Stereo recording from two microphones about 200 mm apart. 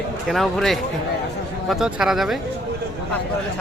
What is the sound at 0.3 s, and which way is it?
Speech, centre (ahead or behind).